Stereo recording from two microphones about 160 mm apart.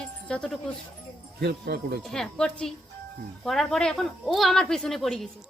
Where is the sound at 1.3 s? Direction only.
90° right.